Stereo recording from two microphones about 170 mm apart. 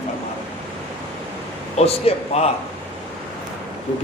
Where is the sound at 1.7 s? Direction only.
40° left (ahead or behind).